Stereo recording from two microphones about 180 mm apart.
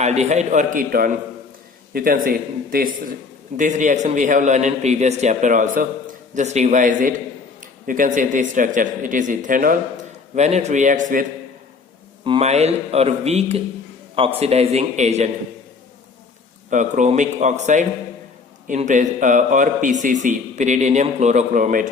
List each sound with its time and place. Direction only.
0.0 s a man's voice: 40° right (ahead or behind)
12.2 s speech: 30° right (ahead or behind)
16.6 s a man's voice: 45° right (ahead or behind)